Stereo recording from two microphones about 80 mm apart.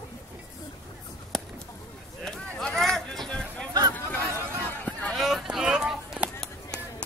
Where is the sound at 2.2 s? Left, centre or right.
Centre.